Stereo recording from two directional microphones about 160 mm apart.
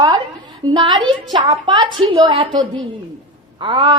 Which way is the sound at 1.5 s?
30° right (ahead or behind).